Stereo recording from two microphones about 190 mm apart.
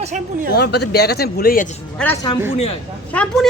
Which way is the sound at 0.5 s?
60° left (ahead or behind).